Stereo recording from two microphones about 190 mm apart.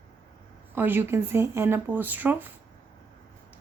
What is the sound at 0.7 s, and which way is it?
A woman's voice, 10° right (ahead or behind).